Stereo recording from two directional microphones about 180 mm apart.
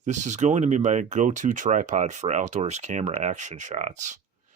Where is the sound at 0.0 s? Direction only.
40° right (ahead or behind).